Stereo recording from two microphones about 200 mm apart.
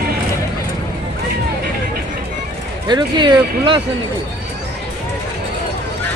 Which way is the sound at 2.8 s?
20° right (ahead or behind).